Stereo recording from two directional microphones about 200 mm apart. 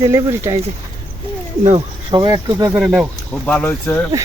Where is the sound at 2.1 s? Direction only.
20° right (ahead or behind).